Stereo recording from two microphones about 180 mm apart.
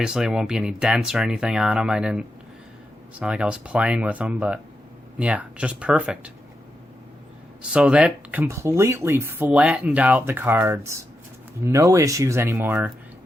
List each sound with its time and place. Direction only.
0.0 s speech: 5° right (ahead or behind)
7.7 s speech: 5° right (ahead or behind)